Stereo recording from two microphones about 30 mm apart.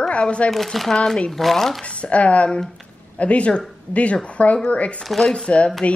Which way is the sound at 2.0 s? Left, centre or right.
Left.